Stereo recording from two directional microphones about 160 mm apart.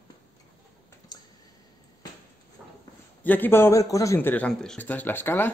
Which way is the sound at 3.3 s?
10° left (ahead or behind).